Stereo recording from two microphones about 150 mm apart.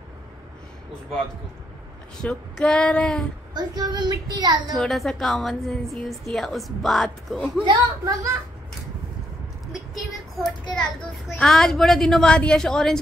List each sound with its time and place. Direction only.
2.2 s female singing: 5° left (ahead or behind)
3.5 s child singing: 25° right (ahead or behind)
4.7 s a woman's voice: centre (ahead or behind)
8.0 s child singing: 20° right (ahead or behind)
9.7 s a sound: centre (ahead or behind)
10.8 s a woman's voice: centre (ahead or behind)